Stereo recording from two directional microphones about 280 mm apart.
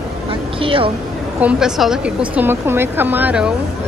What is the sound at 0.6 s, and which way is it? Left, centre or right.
Speech, centre.